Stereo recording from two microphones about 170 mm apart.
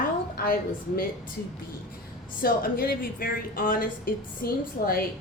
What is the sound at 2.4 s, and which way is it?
A woman's voice, 60° left (ahead or behind).